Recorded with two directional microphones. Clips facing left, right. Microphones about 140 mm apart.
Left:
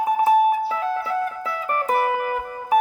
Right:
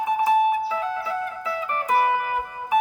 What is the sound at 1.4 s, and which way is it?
Music, 45° left (ahead or behind).